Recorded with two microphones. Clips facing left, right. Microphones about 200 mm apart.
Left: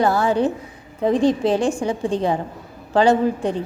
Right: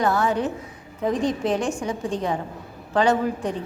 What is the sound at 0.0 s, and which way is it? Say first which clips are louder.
A woman's voice: left 4 dB; 30° left (ahead or behind).